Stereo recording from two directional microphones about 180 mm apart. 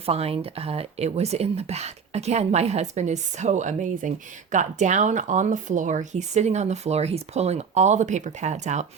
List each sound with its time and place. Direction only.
0.0 s speech: 35° right (ahead or behind)